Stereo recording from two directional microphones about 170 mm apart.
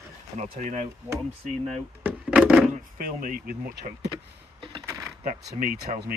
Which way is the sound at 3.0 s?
55° right (ahead or behind).